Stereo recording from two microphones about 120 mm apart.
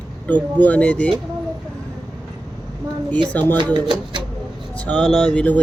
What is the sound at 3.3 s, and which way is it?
Speech, 15° left (ahead or behind).